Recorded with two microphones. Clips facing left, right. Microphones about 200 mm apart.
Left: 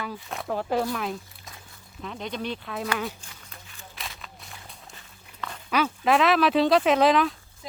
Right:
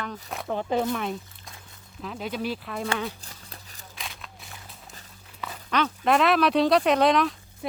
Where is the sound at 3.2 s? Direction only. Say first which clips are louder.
Right 2 dB; 35° right (ahead or behind).